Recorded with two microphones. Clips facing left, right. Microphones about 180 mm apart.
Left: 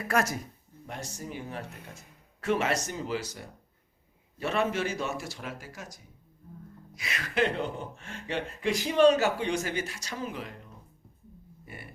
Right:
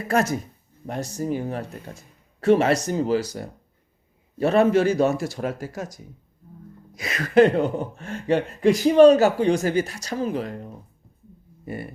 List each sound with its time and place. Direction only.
0.1 s speech: 25° right (ahead or behind)
0.9 s speech: 35° right (ahead or behind)
6.9 s speech: 40° right (ahead or behind)